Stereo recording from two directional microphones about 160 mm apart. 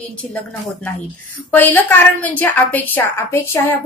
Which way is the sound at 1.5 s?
10° left (ahead or behind).